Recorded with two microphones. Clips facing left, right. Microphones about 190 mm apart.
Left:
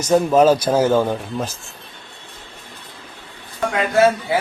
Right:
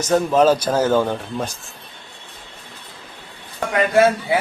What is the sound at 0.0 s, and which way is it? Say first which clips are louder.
Speech: left 2 dB; 10° left (ahead or behind).